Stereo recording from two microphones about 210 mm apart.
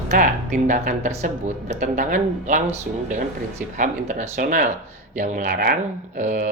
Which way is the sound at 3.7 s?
40° right (ahead or behind).